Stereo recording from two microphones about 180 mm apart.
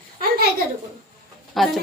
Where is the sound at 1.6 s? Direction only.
Centre (ahead or behind).